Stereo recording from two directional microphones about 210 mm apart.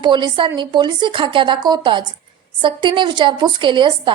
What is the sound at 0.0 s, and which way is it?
A woman's voice, 20° right (ahead or behind).